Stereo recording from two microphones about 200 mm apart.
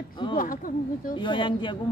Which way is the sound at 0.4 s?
45° left (ahead or behind).